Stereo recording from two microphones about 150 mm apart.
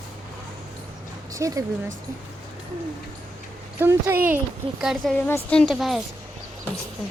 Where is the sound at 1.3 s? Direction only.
20° right (ahead or behind).